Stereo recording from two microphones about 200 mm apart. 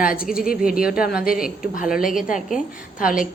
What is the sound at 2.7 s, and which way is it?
Speech, 45° left (ahead or behind).